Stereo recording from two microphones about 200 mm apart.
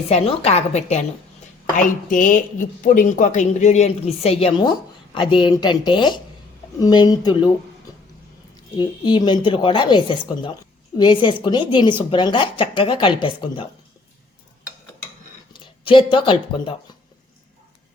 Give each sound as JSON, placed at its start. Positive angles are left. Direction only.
{"t": 0.1, "sound": "a woman's voice", "side_deg": 35}
{"t": 8.8, "sound": "a woman's voice", "side_deg": 20}
{"t": 15.6, "sound": "speech", "side_deg": 25}